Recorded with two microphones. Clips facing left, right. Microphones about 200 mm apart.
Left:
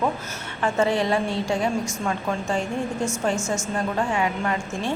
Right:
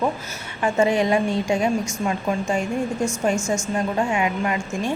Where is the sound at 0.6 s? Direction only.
15° right (ahead or behind).